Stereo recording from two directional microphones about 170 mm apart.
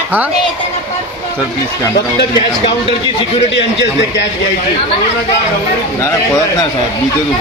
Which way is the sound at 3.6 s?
90° left.